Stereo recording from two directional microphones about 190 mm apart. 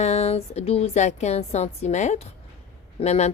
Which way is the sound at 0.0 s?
35° left (ahead or behind).